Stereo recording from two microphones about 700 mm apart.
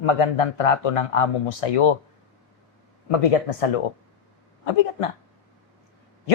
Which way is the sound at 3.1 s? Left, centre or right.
Left.